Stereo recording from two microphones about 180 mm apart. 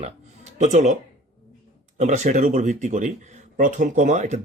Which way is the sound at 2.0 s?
40° right (ahead or behind).